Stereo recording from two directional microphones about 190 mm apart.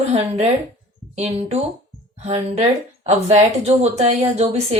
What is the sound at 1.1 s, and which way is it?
Speech, 35° right (ahead or behind).